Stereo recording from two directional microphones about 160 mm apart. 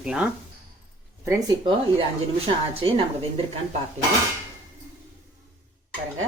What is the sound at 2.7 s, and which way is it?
Speech, 35° right (ahead or behind).